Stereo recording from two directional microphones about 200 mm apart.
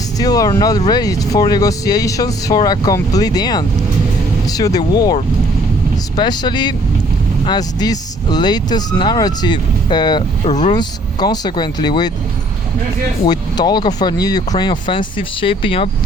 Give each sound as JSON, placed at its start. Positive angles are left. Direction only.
{"t": 0.2, "sound": "speech", "side_deg": 20}
{"t": 10.5, "sound": "speech", "side_deg": 35}
{"t": 10.8, "sound": "speech", "side_deg": 20}
{"t": 13.2, "sound": "speech", "side_deg": 20}